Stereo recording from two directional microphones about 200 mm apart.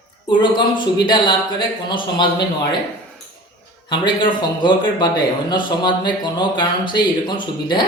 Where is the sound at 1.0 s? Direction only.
25° left (ahead or behind).